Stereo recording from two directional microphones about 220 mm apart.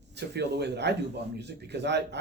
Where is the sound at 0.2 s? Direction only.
50° right (ahead or behind).